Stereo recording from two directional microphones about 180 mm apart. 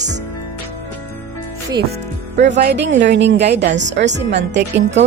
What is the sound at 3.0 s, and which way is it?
A woman's voice, 75° right (ahead or behind).